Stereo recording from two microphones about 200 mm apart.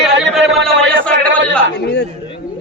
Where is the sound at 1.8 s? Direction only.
55° left (ahead or behind).